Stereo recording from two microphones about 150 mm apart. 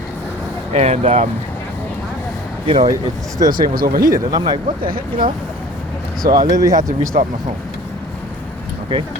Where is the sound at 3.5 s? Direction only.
75° right (ahead or behind).